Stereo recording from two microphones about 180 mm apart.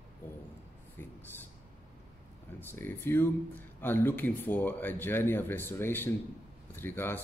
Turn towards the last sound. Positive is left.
turn(degrees=10)  # may be behind; listen again after turning